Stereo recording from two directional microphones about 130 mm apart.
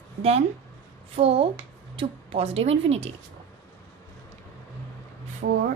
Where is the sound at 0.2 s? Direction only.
55° right (ahead or behind).